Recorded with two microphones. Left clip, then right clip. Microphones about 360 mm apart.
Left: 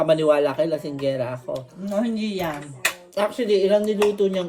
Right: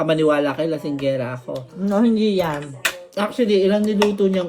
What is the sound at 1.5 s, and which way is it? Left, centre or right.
Speech, centre.